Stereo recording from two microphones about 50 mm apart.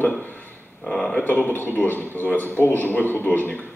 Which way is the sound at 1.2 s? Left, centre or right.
Left.